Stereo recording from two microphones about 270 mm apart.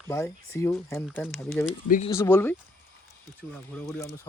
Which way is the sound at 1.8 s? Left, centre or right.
Left.